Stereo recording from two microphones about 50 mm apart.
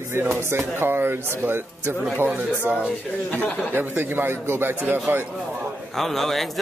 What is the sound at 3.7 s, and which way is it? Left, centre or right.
Speech, right.